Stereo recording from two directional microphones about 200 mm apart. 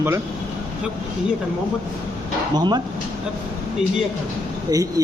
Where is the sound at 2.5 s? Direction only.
20° right (ahead or behind).